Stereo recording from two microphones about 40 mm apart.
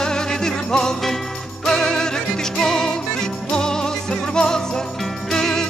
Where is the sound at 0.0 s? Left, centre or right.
Centre.